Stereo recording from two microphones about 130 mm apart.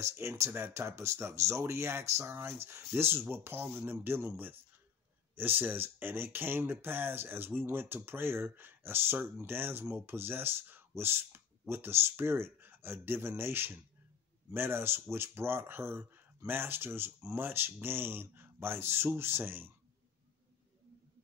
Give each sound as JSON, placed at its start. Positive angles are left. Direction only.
{"t": 0.0, "sound": "speech", "side_deg": -20}